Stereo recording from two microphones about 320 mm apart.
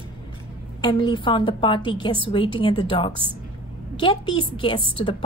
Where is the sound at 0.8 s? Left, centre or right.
Centre.